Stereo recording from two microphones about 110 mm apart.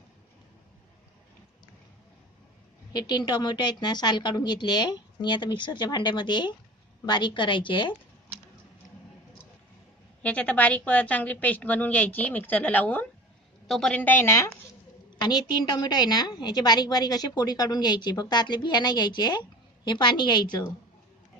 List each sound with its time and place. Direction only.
2.9 s a woman's voice: 40° left (ahead or behind)
10.2 s a woman's voice: 10° left (ahead or behind)
15.1 s a woman's voice: 40° left (ahead or behind)